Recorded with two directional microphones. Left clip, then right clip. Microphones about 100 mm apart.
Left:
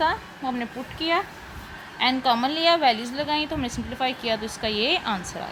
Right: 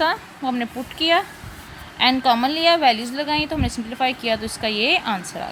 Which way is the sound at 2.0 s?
80° right.